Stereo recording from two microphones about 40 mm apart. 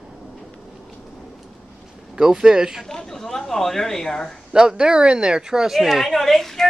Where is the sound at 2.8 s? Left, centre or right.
Centre.